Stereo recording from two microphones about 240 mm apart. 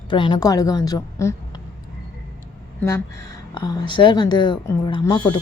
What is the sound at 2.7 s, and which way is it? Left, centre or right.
A woman's voice, centre.